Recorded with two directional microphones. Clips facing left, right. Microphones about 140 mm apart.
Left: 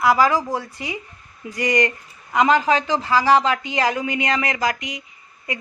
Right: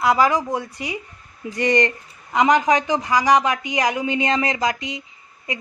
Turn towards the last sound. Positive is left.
turn(degrees=-20)  # may be behind; listen again after turning